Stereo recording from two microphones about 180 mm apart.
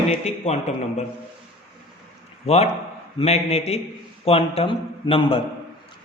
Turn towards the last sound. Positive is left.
turn(degrees=30)  # may be behind; listen again after turning